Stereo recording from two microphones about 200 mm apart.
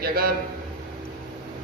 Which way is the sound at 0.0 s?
50° right (ahead or behind).